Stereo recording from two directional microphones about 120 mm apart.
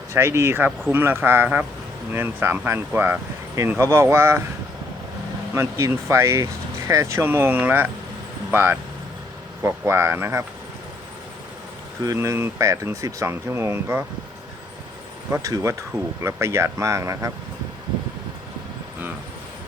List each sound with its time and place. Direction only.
0.1 s speech: 20° right (ahead or behind)
5.5 s speech: 20° right (ahead or behind)
12.0 s speech: 25° right (ahead or behind)
15.3 s speech: 25° right (ahead or behind)